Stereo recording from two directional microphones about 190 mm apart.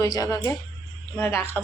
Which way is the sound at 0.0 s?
20° left (ahead or behind).